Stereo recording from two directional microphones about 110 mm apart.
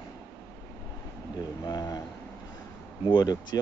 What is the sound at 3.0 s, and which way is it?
Speech, 40° left (ahead or behind).